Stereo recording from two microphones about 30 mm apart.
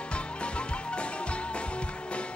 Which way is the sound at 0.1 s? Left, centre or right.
Left.